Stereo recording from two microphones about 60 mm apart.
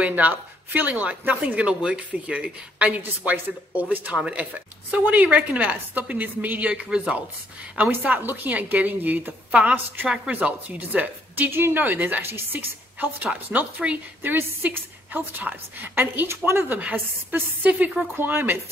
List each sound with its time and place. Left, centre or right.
0.0 s speech: right
1.5 s speech: centre
6.7 s speech: centre
7.9 s speech: right; by 10.3 s centre
10.3 s speech: right
14.3 s a woman's voice: right
16.3 s a woman's voice: right
18.1 s a woman's voice: right